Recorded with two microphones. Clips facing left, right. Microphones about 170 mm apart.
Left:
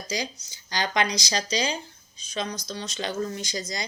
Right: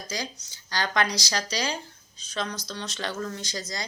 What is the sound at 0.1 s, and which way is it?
Speech, 15° left (ahead or behind).